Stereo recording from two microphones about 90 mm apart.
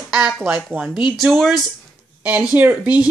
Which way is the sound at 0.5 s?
15° right (ahead or behind).